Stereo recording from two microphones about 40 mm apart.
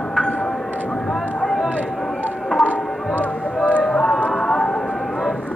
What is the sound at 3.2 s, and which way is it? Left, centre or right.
Music, right.